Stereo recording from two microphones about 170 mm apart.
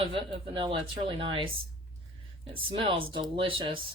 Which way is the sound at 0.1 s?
30° right (ahead or behind).